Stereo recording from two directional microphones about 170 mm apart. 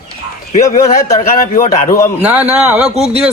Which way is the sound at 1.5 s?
50° left (ahead or behind).